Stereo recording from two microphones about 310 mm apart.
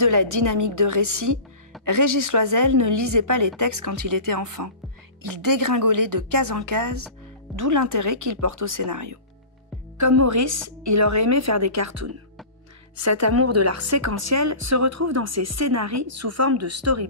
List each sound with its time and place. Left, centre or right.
0.0 s a woman's voice: right